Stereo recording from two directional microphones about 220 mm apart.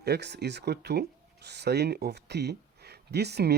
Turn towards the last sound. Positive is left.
turn(degrees=-50)  # may be behind; listen again after turning